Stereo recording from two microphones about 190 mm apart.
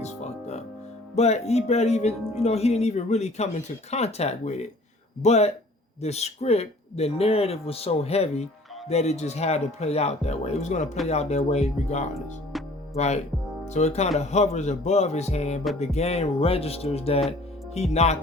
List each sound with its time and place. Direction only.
0.0 s music: 35° left (ahead or behind)
1.1 s speech: 35° left (ahead or behind)
12.5 s music: centre (ahead or behind)
13.0 s speech: 35° left (ahead or behind)